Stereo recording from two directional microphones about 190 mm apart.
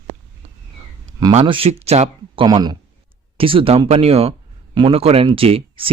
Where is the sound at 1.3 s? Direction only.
30° right (ahead or behind).